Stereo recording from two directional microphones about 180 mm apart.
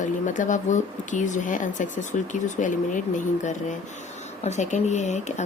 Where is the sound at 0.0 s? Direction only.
45° left (ahead or behind).